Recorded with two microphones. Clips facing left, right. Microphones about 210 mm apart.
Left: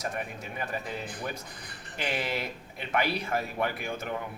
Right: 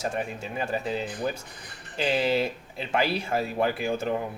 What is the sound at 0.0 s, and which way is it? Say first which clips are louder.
Speech: right 5 dB; 30° right (ahead or behind).